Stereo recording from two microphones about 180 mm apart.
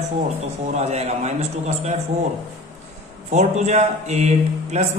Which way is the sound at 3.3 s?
40° right (ahead or behind).